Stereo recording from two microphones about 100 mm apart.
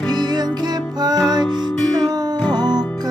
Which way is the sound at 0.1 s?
45° right (ahead or behind).